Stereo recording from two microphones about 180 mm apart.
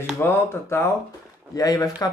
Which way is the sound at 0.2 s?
15° left (ahead or behind).